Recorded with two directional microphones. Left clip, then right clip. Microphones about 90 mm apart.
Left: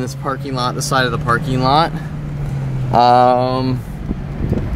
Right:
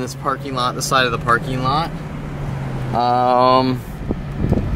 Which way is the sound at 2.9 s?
15° left (ahead or behind).